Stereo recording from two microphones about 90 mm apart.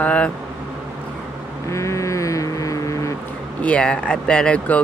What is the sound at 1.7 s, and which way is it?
Vehicle, 35° left (ahead or behind).